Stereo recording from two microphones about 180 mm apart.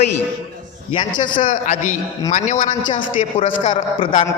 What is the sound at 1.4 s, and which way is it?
A man's voice, 45° left (ahead or behind).